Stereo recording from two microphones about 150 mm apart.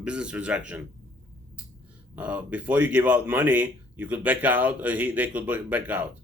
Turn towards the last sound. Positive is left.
turn(degrees=-10)  # may be behind; listen again after turning